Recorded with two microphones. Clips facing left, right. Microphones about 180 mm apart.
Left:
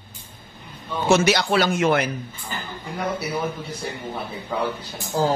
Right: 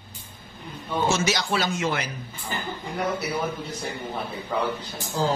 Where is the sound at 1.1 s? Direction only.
65° left (ahead or behind).